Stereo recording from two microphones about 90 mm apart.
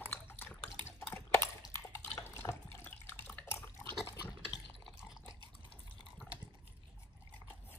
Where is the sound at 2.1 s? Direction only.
40° left (ahead or behind).